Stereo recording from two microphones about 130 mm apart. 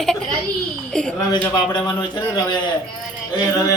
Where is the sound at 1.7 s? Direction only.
30° left (ahead or behind).